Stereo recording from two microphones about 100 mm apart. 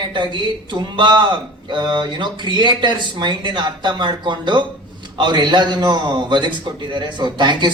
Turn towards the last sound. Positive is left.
turn(degrees=-50)  # may be behind; listen again after turning